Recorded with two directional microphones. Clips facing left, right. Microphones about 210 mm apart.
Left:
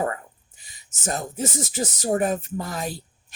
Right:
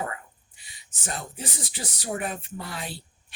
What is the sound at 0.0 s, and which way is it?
Speech, 40° left (ahead or behind).